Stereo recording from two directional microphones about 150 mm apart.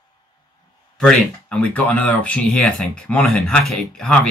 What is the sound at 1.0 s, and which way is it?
Speech, 5° left (ahead or behind).